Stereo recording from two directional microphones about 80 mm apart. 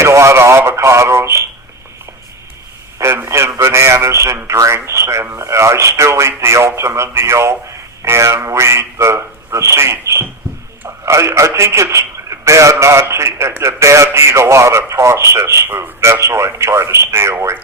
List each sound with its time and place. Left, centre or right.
0.0 s radio: right
3.0 s a man's voice: right